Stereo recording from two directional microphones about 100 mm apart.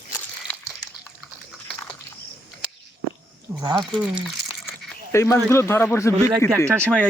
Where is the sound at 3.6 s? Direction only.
50° right (ahead or behind).